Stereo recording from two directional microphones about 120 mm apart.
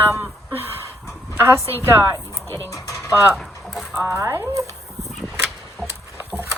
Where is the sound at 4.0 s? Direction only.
20° right (ahead or behind).